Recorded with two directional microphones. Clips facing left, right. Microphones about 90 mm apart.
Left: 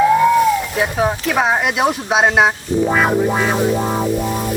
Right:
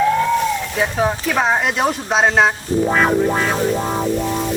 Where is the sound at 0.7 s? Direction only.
5° left (ahead or behind).